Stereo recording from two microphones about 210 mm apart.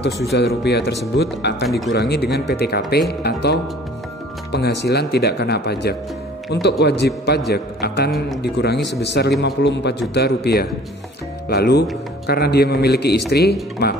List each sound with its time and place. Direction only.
0.3 s a man's voice: 50° left (ahead or behind)